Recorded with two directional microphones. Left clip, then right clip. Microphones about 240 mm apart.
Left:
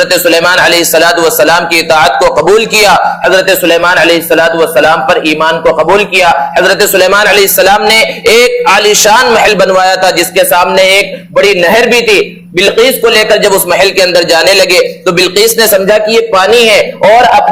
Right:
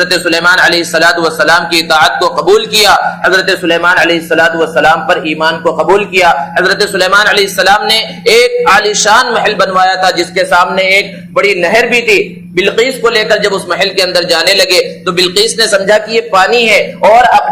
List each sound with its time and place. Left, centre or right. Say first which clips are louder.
0.0 s a man's voice: left 3 dB; left